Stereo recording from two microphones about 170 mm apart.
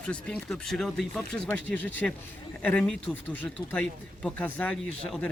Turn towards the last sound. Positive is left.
turn(degrees=5)  # may be behind; listen again after turning